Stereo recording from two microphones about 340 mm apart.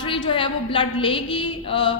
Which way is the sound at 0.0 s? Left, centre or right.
Centre.